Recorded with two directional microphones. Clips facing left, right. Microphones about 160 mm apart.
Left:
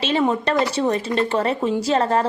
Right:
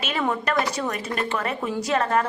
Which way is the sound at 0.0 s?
25° left (ahead or behind).